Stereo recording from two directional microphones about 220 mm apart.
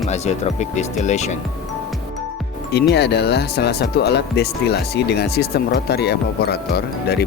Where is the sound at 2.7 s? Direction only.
50° left (ahead or behind).